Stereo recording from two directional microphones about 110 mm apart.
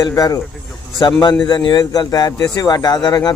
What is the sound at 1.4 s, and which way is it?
A man's voice, 40° left (ahead or behind).